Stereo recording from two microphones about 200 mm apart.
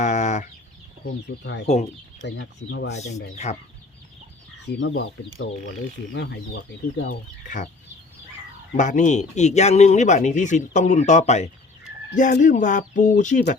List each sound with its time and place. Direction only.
0.0 s chicken: 35° left (ahead or behind)
1.0 s speech: 65° left (ahead or behind)
3.3 s speech: 35° left (ahead or behind)
4.6 s speech: 60° left (ahead or behind)
6.1 s speech: 60° left (ahead or behind)
7.4 s speech: 40° left (ahead or behind)
8.7 s speech: 40° left (ahead or behind)